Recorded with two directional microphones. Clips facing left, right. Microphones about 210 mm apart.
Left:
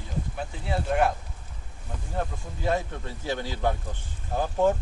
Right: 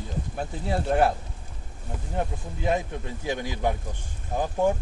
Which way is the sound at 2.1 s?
20° right (ahead or behind).